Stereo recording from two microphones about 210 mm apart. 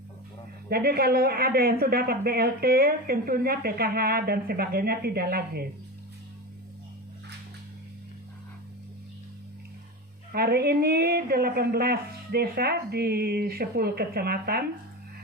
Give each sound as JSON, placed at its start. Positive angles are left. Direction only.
{"t": 0.7, "sound": "speech", "side_deg": -45}
{"t": 10.3, "sound": "speech", "side_deg": -50}